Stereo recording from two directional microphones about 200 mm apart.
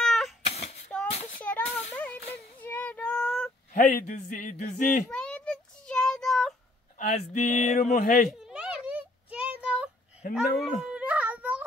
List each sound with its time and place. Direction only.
0.0 s cat: centre (ahead or behind)
0.5 s a sound: 30° left (ahead or behind)
1.1 s child singing: 35° left (ahead or behind)
1.4 s a sound: 10° left (ahead or behind)
2.3 s child singing: 10° left (ahead or behind)
3.7 s speech: 40° left (ahead or behind)
5.1 s child singing: 5° left (ahead or behind)
7.0 s speech: 35° left (ahead or behind)
8.3 s a sound: centre (ahead or behind)